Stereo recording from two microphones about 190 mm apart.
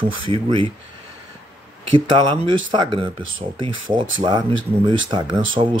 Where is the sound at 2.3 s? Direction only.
25° right (ahead or behind).